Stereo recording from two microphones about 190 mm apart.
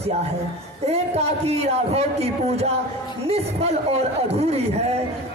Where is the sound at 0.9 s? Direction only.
35° right (ahead or behind).